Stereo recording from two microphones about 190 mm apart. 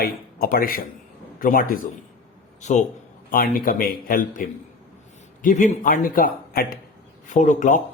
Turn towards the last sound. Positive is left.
turn(degrees=40)  # may be behind; listen again after turning